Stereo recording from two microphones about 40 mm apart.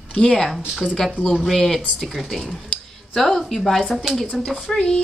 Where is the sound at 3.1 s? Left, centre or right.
Centre.